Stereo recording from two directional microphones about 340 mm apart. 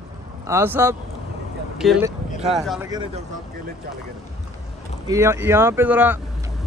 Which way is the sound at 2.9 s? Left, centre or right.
Centre.